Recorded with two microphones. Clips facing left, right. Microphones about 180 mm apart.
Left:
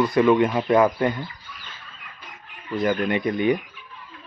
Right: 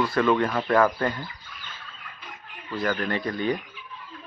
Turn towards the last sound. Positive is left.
turn(degrees=15)  # may be behind; listen again after turning